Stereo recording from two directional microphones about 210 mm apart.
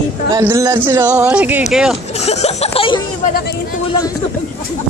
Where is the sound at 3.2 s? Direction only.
45° left (ahead or behind).